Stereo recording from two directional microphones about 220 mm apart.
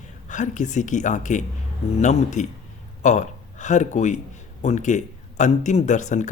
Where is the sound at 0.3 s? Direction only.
35° left (ahead or behind).